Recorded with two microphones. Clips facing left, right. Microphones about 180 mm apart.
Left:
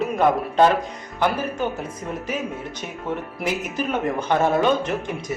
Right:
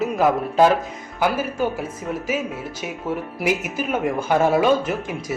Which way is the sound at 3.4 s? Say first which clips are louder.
Right 3 dB; 10° right (ahead or behind).